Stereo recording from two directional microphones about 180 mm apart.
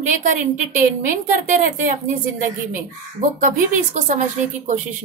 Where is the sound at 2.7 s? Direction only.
45° right (ahead or behind).